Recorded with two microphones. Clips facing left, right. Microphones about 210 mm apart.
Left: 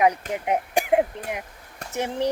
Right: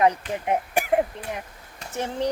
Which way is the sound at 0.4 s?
15° left (ahead or behind).